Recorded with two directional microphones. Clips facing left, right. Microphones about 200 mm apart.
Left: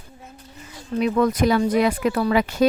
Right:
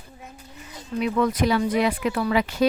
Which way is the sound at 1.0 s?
45° left (ahead or behind).